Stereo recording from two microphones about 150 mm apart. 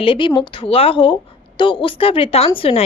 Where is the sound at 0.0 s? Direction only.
35° left (ahead or behind).